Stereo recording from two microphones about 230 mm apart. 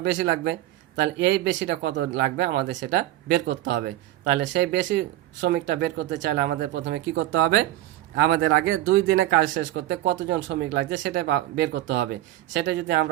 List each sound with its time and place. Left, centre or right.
0.0 s speech: right
9.4 s speech: right